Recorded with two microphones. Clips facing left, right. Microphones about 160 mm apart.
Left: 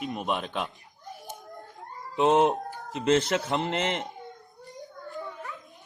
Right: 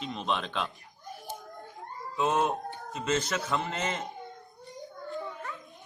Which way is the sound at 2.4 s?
80° left.